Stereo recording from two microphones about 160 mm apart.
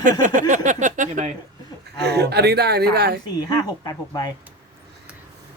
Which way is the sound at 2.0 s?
90° right.